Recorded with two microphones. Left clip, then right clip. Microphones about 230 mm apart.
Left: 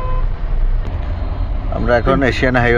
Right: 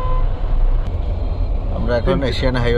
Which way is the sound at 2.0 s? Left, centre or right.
Centre.